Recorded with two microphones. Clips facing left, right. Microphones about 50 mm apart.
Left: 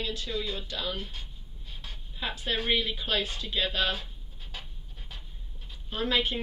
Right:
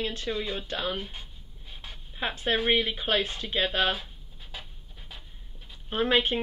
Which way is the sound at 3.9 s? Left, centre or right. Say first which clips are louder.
Right 2 dB; centre.